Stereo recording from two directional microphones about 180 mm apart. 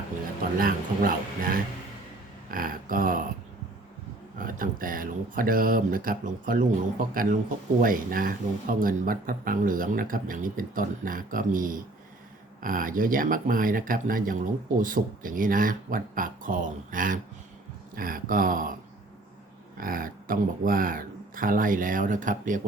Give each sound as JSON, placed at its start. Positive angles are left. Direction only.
{"t": 0.6, "sound": "speech", "side_deg": -50}
{"t": 4.4, "sound": "speech", "side_deg": -50}
{"t": 19.7, "sound": "speech", "side_deg": -50}